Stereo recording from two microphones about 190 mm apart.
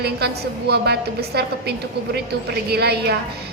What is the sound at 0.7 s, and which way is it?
Speech, 60° right (ahead or behind).